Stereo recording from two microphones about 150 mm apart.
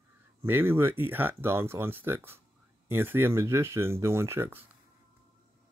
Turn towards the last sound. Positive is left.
turn(degrees=-15)  # may be behind; listen again after turning